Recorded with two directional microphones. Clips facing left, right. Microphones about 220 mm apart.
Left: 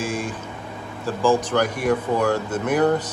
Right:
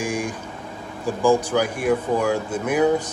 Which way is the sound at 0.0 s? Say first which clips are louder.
Right 1 dB; 15° right (ahead or behind).